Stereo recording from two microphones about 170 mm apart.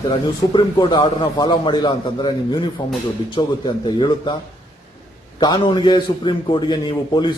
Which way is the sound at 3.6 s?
30° left (ahead or behind).